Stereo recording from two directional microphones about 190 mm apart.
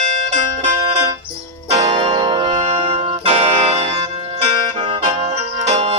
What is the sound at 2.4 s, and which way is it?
Music, 40° right (ahead or behind).